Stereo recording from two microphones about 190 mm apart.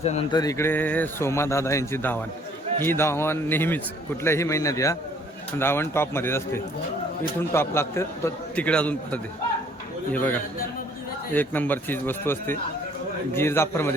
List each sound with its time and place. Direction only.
0.0 s a sound: 35° left (ahead or behind)
0.3 s a man's voice: 15° left (ahead or behind)
11.3 s a man's voice: 10° left (ahead or behind)